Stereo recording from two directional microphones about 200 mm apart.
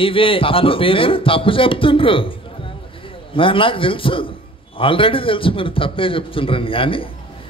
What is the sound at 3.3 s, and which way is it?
A man's voice, 25° left (ahead or behind).